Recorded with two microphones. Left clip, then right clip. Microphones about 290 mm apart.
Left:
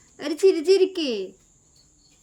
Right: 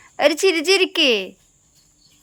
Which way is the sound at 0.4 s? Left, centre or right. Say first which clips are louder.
Right 1 dB; centre.